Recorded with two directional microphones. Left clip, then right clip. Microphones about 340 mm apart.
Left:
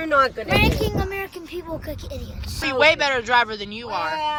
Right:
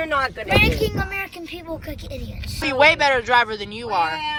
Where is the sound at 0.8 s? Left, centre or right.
Centre.